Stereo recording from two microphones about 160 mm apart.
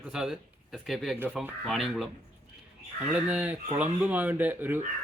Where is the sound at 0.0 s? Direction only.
5° right (ahead or behind).